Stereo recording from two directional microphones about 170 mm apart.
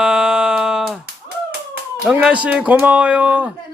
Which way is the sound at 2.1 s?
5° right (ahead or behind).